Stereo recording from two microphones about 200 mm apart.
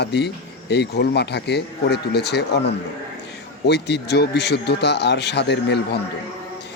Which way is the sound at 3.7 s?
55° left (ahead or behind).